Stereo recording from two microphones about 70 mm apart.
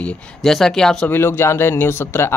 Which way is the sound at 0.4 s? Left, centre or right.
Centre.